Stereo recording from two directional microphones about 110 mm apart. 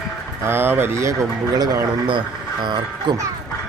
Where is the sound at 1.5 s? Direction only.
40° right (ahead or behind).